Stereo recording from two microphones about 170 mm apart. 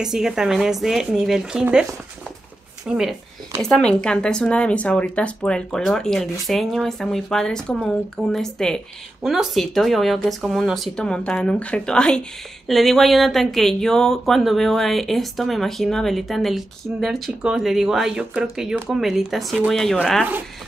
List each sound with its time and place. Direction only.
0.0 s speech: 5° right (ahead or behind)
2.9 s speech: 5° right (ahead or behind)